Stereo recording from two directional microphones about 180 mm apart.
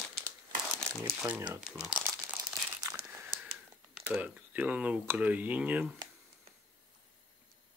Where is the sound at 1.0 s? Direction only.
10° right (ahead or behind).